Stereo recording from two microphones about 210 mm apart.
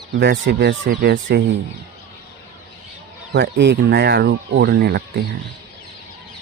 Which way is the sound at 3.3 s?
55° right (ahead or behind).